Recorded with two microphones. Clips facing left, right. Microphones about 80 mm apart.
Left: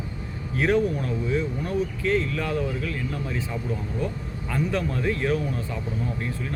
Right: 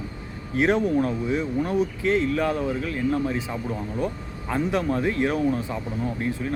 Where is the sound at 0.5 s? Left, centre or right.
Right.